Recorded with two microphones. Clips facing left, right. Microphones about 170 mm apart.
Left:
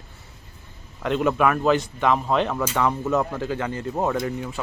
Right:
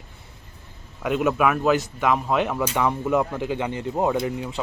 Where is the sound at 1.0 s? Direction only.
5° right (ahead or behind).